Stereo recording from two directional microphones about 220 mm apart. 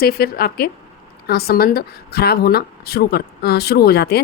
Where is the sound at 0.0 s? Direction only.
45° left (ahead or behind).